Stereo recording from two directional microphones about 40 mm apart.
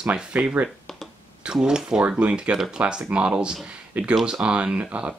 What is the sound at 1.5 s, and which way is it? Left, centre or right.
Speech, centre.